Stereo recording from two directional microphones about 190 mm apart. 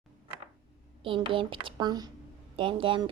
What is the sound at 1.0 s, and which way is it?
A woman's voice, 25° right (ahead or behind).